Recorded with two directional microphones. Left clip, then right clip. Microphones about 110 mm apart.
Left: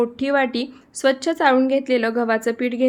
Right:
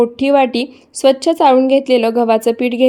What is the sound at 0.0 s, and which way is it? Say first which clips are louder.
A woman's voice: right 8 dB; 20° right (ahead or behind).